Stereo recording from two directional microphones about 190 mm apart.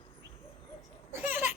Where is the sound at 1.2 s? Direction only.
10° right (ahead or behind).